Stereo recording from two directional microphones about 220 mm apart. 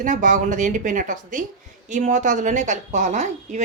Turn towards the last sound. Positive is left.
turn(degrees=-35)  # may be behind; listen again after turning